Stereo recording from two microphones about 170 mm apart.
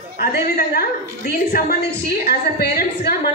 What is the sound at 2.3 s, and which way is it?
Speech, 65° left (ahead or behind).